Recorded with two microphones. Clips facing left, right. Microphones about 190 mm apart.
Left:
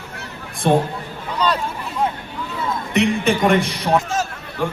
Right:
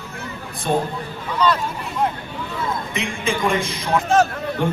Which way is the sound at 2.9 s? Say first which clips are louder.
Left 7 dB; 65° left (ahead or behind).